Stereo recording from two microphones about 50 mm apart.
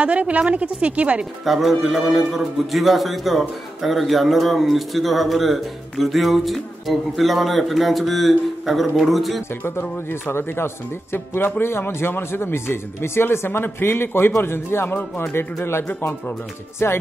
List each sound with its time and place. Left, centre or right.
0.0 s a woman's voice: right
1.4 s a man's voice: centre
9.7 s speech: left